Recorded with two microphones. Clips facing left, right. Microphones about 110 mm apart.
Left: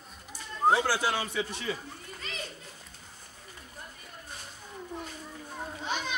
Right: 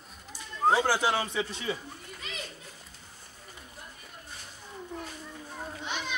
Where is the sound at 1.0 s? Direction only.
25° right (ahead or behind).